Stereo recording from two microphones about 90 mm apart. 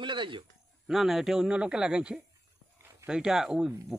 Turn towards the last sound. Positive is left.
turn(degrees=-5)  # may be behind; listen again after turning